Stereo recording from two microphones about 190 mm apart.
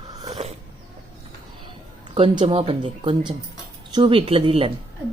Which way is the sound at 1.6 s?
25° right (ahead or behind).